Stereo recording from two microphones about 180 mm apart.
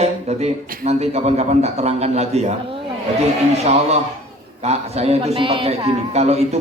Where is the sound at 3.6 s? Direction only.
35° right (ahead or behind).